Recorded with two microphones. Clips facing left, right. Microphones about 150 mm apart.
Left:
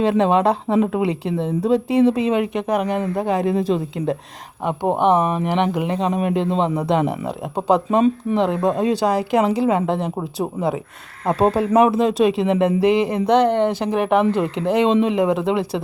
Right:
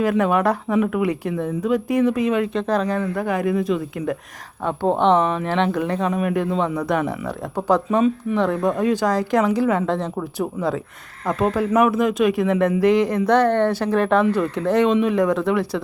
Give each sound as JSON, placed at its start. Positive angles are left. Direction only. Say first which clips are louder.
{"t": 0.0, "sound": "a woman's voice", "louder": "left 2 dB", "side_deg": 25}
{"t": 4.6, "sound": "a woman's voice", "louder": "even", "side_deg": 15}
{"t": 9.0, "sound": "a woman's voice", "louder": "left 1 dB", "side_deg": 10}